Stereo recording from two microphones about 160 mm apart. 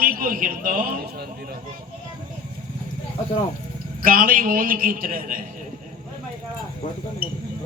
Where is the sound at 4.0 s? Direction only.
65° right (ahead or behind).